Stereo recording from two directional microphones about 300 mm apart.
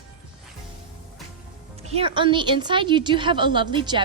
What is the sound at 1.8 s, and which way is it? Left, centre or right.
A woman's voice, centre.